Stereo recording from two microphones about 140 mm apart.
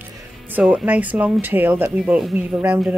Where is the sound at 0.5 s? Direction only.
10° right (ahead or behind).